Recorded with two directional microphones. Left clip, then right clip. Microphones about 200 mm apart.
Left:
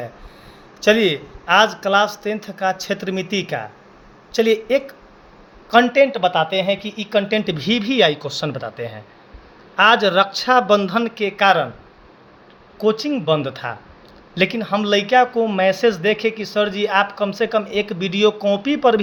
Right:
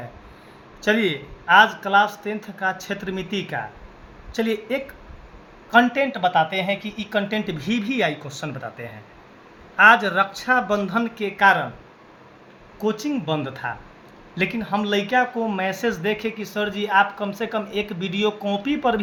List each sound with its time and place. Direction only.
0.8 s speech: 50° left (ahead or behind)
12.8 s speech: 45° left (ahead or behind)